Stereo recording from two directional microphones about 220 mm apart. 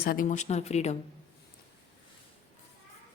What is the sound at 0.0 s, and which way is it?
Speech, 40° left (ahead or behind).